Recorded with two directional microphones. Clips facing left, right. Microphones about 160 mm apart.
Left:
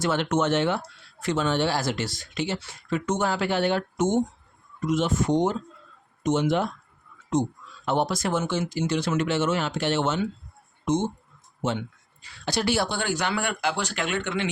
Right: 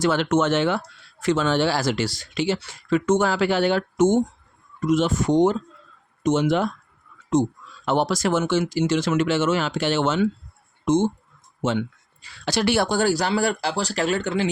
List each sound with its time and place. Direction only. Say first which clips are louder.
0.0 s speech: right 4 dB; 90° right
7.9 s speech: right 4 dB; 90° right
11.6 s speech: right 4 dB; 90° right; by 12.9 s 65° right (ahead or behind)
12.9 s speech: right 6 dB; 40° right (ahead or behind)